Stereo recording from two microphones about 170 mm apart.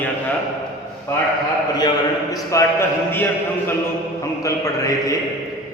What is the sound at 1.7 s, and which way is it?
A man's voice, 20° left (ahead or behind).